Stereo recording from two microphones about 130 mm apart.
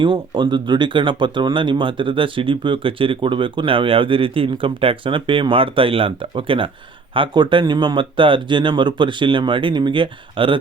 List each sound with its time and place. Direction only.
0.0 s speech: 40° right (ahead or behind)